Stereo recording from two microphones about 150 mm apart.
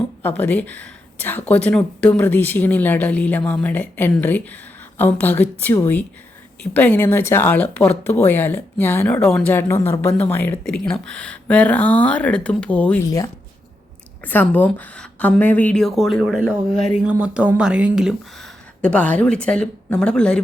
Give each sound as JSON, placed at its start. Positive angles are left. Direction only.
{"t": 0.2, "sound": "speech", "side_deg": 10}
{"t": 13.1, "sound": "speech", "side_deg": 20}
{"t": 14.3, "sound": "speech", "side_deg": 10}
{"t": 18.8, "sound": "speech", "side_deg": 10}